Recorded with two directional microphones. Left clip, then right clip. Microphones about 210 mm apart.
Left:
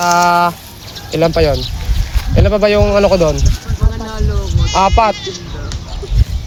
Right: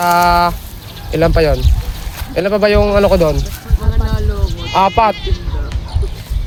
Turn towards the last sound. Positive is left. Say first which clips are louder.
# left 1 dB
turn(degrees=-30)  # may be behind; listen again after turning